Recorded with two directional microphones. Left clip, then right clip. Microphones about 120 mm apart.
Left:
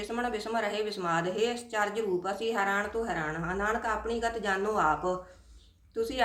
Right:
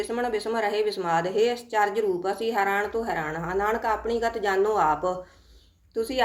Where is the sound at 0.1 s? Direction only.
30° right (ahead or behind).